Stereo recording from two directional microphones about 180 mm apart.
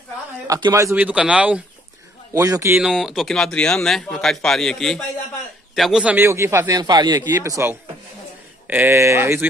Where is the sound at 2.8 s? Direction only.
5° right (ahead or behind).